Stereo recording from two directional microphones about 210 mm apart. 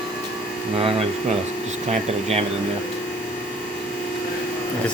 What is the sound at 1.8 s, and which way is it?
Speech, 30° right (ahead or behind).